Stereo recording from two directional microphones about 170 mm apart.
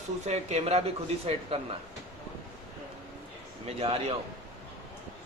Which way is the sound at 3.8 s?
35° right (ahead or behind).